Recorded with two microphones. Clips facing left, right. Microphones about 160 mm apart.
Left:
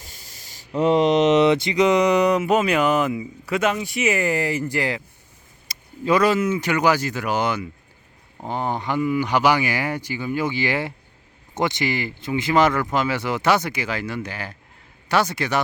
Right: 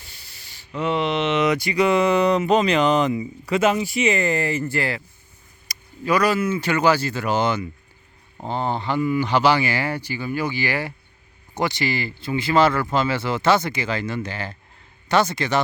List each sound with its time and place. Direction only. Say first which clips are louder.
0.0 s spray: left 3 dB; 40° left (ahead or behind)
1.5 s speech: left 2 dB; 25° left (ahead or behind)